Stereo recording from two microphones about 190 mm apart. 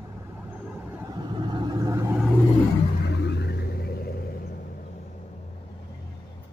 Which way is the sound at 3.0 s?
60° left (ahead or behind).